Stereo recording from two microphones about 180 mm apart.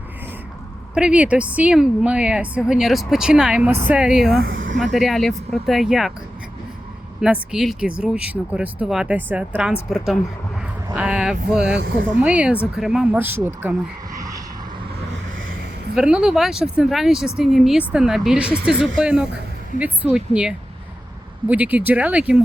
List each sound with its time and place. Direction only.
0.9 s speech: 5° right (ahead or behind)
4.4 s speech: 75° right (ahead or behind)
4.8 s speech: centre (ahead or behind)
7.2 s speech: 5° right (ahead or behind)
11.6 s speech: 70° right (ahead or behind)
12.1 s speech: 5° right (ahead or behind)
14.2 s vehicle: 20° right (ahead or behind)
16.0 s speech: 5° right (ahead or behind)